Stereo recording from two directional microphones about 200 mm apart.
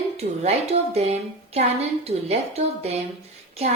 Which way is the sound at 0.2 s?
30° right (ahead or behind).